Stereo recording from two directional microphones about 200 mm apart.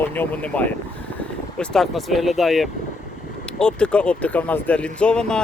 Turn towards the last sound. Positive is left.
turn(degrees=5)  # may be behind; listen again after turning